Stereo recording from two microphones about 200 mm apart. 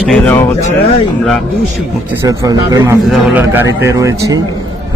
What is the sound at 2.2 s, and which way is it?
Speech, 20° right (ahead or behind).